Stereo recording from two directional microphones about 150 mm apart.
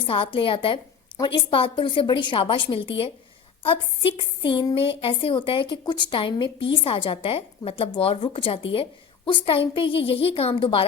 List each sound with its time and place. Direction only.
0.0 s a woman's voice: 35° left (ahead or behind)